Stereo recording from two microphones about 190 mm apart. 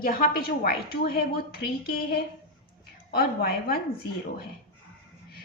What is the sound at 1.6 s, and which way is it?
A woman's voice, 55° left (ahead or behind).